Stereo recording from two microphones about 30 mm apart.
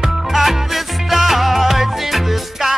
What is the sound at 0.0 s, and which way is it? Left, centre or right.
Music, centre.